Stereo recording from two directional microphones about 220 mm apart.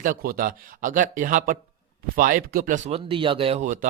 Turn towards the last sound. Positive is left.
turn(degrees=-35)  # may be behind; listen again after turning